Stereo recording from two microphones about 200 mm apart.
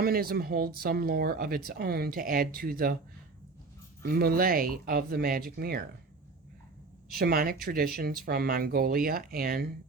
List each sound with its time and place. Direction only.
0.0 s speech: 50° right (ahead or behind)
4.0 s speech: 50° right (ahead or behind)
7.2 s speech: 50° right (ahead or behind)